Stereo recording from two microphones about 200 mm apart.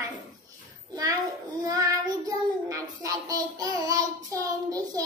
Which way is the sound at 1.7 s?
20° right (ahead or behind).